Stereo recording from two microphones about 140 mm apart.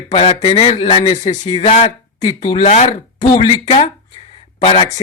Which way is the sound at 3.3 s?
40° left (ahead or behind).